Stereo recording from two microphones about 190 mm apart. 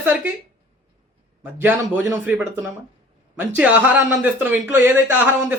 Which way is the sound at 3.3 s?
10° right (ahead or behind).